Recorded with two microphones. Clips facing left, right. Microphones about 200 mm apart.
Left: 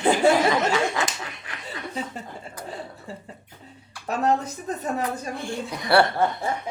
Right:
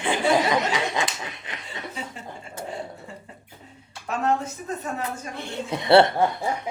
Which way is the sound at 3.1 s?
35° left (ahead or behind).